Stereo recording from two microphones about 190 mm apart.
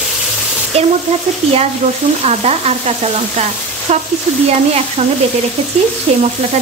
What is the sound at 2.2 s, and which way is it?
Frying, 35° right (ahead or behind).